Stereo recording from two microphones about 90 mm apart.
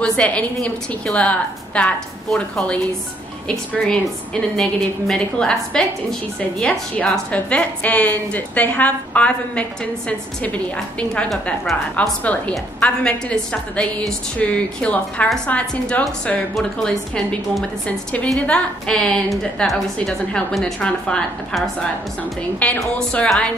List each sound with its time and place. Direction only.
0.0 s a woman's voice: 10° left (ahead or behind)
22.6 s a woman's voice: 15° left (ahead or behind)